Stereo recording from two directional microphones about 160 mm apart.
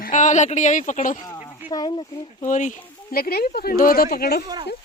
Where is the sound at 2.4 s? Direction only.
50° left (ahead or behind).